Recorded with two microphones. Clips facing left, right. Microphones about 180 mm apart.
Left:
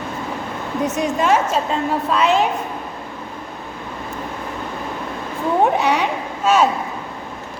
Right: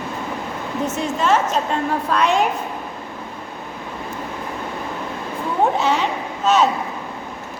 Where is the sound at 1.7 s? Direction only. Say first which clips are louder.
Left 1 dB; centre (ahead or behind).